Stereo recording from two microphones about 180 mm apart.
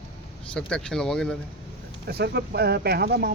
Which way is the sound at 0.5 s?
5° left (ahead or behind).